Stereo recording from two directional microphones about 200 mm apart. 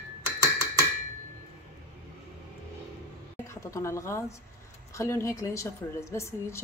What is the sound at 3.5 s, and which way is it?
A woman's voice, 15° left (ahead or behind).